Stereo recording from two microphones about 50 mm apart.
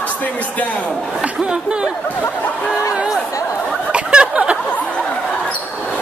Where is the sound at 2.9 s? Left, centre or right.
Centre.